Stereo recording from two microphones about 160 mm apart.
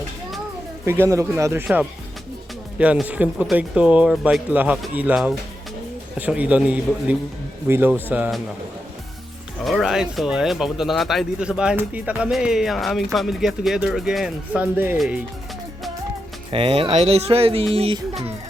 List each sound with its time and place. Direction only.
0.9 s speech: 15° right (ahead or behind)
1.6 s speech: 5° right (ahead or behind)
9.6 s speech: centre (ahead or behind)
16.5 s speech: 35° right (ahead or behind)